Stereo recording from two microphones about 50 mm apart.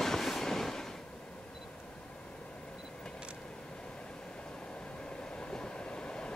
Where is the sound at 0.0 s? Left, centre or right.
Centre.